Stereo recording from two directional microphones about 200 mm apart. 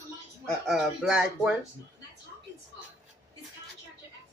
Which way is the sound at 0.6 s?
5° right (ahead or behind).